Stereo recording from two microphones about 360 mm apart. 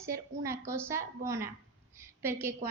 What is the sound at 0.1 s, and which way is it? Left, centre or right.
A woman's voice, centre.